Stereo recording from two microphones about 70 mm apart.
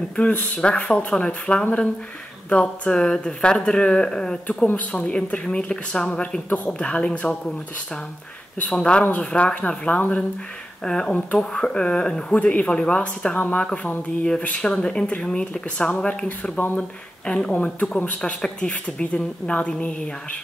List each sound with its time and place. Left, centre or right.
0.1 s speech: centre
16.3 s speech: left